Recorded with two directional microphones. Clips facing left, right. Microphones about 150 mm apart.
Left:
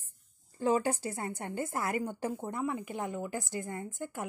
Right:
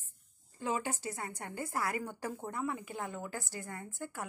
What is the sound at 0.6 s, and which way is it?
A woman's voice, 35° left (ahead or behind).